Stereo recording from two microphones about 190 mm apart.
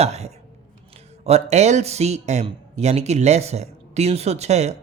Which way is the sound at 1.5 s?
35° right (ahead or behind).